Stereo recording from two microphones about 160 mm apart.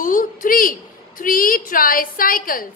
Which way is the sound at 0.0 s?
60° left (ahead or behind).